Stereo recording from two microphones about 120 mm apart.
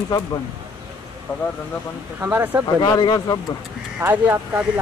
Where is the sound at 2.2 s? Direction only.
20° right (ahead or behind).